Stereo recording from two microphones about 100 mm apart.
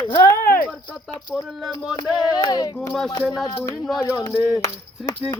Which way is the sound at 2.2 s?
40° left (ahead or behind).